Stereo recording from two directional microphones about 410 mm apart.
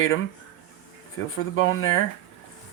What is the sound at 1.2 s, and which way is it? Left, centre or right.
Speech, left.